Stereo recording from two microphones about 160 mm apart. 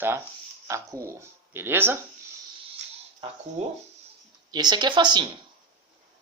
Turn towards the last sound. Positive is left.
turn(degrees=-30)  # may be behind; listen again after turning